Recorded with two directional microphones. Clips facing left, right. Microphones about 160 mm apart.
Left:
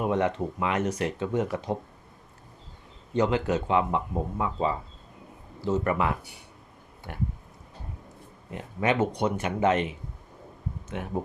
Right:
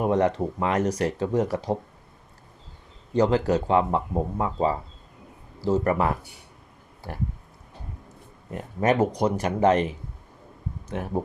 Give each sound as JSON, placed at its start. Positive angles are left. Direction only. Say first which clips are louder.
{"t": 0.0, "sound": "speech", "louder": "right 4 dB", "side_deg": -35}
{"t": 3.1, "sound": "speech", "louder": "right 4 dB", "side_deg": -35}
{"t": 8.5, "sound": "speech", "louder": "right 3 dB", "side_deg": -45}